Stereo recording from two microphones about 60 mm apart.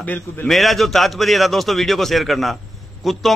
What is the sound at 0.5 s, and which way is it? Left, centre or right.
A man's voice, centre.